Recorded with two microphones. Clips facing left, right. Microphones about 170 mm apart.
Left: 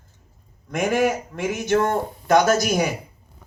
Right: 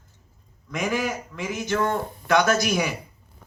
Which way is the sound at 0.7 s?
50° left (ahead or behind).